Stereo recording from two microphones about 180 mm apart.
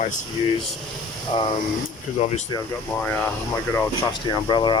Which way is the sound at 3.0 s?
10° left (ahead or behind).